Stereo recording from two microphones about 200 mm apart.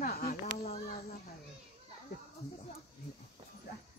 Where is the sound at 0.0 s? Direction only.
50° left (ahead or behind).